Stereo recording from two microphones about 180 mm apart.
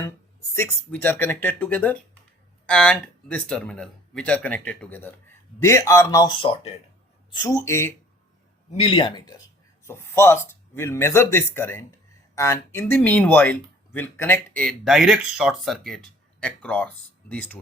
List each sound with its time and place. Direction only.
0.5 s speech: 10° left (ahead or behind); by 6.7 s 30° left (ahead or behind)
7.3 s speech: 20° left (ahead or behind)
8.7 s speech: 30° left (ahead or behind); by 17.6 s 10° left (ahead or behind)